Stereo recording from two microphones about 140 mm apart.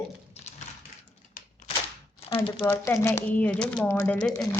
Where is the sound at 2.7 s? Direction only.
20° left (ahead or behind).